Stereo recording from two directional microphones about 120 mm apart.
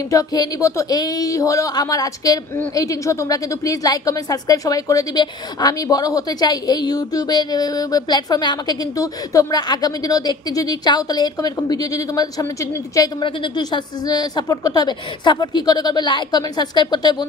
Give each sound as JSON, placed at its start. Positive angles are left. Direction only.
{"t": 0.1, "sound": "a woman's voice", "side_deg": 30}